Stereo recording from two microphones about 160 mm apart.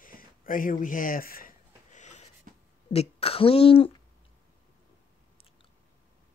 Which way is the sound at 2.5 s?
60° right (ahead or behind).